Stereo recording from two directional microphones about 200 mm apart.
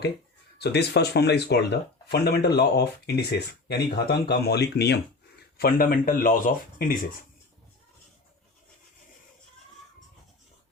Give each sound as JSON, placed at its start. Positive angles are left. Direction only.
{"t": 0.6, "sound": "speech", "side_deg": 55}